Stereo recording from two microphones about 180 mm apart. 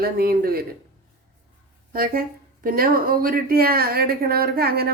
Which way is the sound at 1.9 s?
55° right (ahead or behind).